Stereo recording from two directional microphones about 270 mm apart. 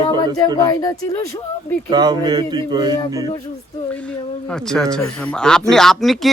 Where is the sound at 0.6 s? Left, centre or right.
Centre.